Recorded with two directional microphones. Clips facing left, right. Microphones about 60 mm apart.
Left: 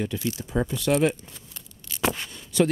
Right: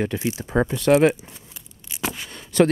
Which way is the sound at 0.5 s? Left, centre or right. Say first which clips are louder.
Right 6 dB; right.